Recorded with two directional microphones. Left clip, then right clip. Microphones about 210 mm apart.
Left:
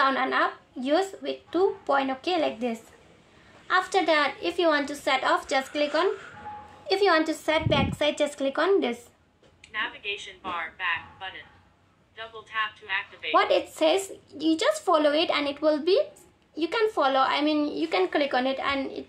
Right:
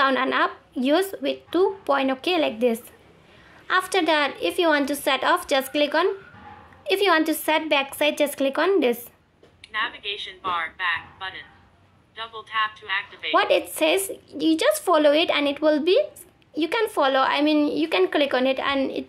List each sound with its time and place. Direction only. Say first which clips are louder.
0.0 s a woman's voice: right 3 dB; 40° right (ahead or behind)
9.7 s speech: right 4 dB; 25° right (ahead or behind)
13.4 s a woman's voice: right 2 dB; 35° right (ahead or behind)